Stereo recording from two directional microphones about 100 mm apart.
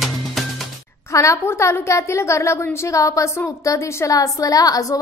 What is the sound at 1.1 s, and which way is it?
A woman's voice, 30° left (ahead or behind).